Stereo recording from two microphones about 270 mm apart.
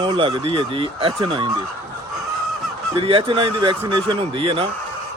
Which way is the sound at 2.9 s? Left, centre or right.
Right.